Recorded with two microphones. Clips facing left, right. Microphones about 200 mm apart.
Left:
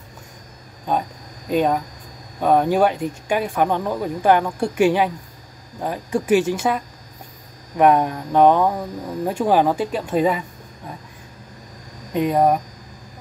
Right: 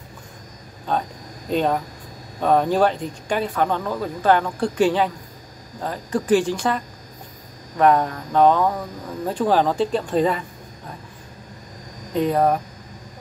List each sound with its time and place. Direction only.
1.5 s speech: 5° left (ahead or behind)
12.1 s speech: 15° left (ahead or behind)